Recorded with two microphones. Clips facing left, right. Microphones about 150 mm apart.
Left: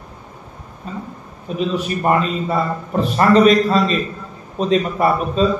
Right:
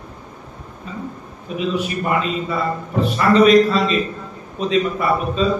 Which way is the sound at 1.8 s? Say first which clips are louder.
Left 3 dB; 40° left (ahead or behind).